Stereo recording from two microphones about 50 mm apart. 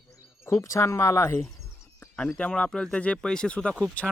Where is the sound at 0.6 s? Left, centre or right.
Left.